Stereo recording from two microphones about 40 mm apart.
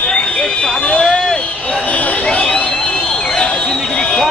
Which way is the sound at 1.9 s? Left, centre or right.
Left.